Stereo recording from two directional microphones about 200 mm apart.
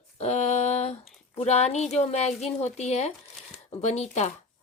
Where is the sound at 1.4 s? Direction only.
35° left (ahead or behind).